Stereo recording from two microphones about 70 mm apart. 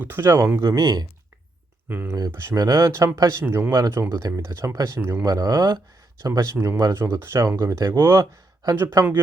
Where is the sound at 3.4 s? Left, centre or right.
Right.